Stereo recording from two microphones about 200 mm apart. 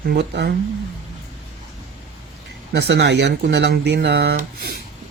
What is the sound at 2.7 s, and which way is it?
Speech, 60° right (ahead or behind).